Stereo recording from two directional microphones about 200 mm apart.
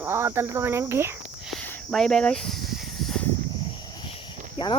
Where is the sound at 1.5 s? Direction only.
5° left (ahead or behind).